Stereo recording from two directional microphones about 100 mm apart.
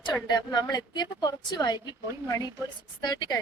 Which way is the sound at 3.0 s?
45° left (ahead or behind).